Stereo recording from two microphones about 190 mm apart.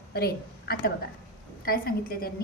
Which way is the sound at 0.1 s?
55° left (ahead or behind).